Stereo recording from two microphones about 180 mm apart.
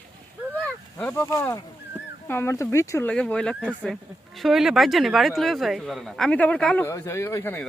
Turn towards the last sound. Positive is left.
turn(degrees=15)  # may be behind; listen again after turning